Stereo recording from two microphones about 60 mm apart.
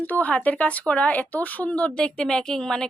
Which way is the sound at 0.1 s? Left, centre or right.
Left.